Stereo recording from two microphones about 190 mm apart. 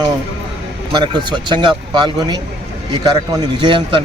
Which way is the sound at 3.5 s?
25° right (ahead or behind).